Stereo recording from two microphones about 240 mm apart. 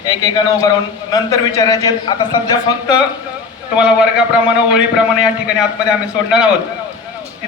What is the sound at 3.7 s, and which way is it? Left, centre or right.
A man's voice, centre.